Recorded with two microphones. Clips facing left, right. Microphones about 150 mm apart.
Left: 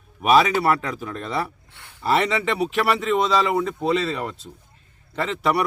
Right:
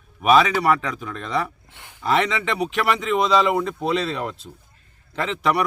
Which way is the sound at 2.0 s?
5° left (ahead or behind).